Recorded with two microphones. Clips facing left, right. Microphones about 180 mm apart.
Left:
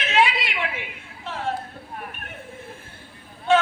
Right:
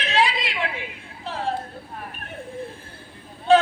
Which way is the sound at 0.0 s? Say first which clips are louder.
Left 1 dB; 35° right (ahead or behind).